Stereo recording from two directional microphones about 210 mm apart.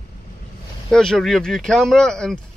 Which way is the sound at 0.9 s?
Centre (ahead or behind).